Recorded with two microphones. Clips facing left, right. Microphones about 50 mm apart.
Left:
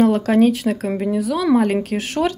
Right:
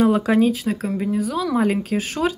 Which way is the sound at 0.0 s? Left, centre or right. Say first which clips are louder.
Left 1 dB; centre.